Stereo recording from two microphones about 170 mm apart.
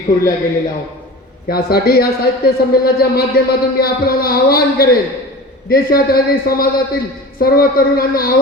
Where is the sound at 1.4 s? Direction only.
65° left (ahead or behind).